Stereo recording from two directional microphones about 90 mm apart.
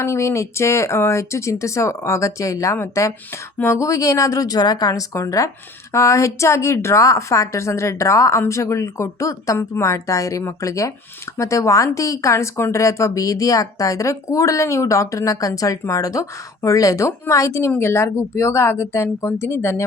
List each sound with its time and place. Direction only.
0.0 s a woman's voice: 30° left (ahead or behind)